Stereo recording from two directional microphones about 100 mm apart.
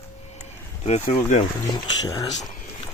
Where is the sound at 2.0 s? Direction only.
40° left (ahead or behind).